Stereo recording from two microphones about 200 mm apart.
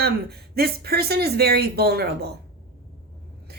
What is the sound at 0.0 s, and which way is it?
A woman's voice, 55° right (ahead or behind).